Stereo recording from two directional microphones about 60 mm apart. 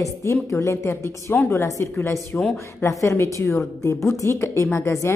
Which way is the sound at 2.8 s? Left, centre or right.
Left.